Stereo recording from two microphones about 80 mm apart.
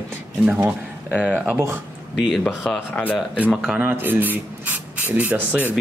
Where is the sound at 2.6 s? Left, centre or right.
Centre.